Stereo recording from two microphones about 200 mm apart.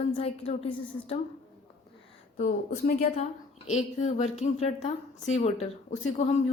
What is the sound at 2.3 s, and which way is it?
A woman's voice, 45° left (ahead or behind).